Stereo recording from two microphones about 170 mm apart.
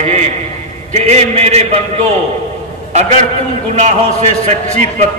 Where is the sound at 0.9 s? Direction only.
40° right (ahead or behind).